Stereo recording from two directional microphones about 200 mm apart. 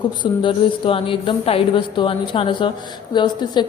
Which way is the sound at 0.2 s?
25° left (ahead or behind).